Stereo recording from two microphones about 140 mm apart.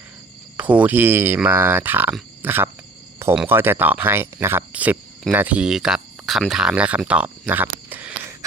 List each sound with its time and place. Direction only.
0.5 s speech: 10° right (ahead or behind)